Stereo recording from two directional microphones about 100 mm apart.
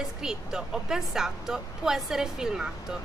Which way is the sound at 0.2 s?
5° right (ahead or behind).